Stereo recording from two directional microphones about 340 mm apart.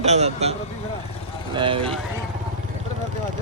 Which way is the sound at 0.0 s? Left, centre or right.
Centre.